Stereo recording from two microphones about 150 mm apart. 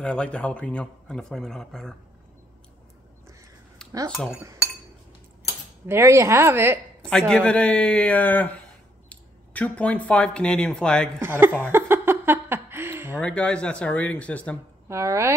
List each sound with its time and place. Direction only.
0.0 s speech: 5° left (ahead or behind)
5.9 s a woman's voice: 20° right (ahead or behind)
7.0 s a man's voice: 5° left (ahead or behind)
11.1 s a woman's voice: 15° right (ahead or behind)
11.6 s a sound: 15° right (ahead or behind)
13.2 s a man's voice: 5° left (ahead or behind)
14.9 s speech: 20° right (ahead or behind)